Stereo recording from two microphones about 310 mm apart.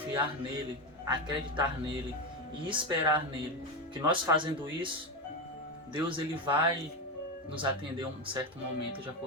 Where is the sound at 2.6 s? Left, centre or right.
Centre.